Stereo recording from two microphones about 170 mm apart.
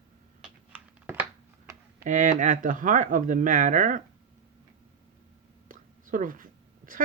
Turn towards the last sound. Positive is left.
turn(degrees=-55)  # may be behind; listen again after turning